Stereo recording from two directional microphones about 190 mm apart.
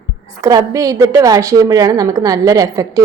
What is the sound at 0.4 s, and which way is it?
A woman's voice, 15° right (ahead or behind).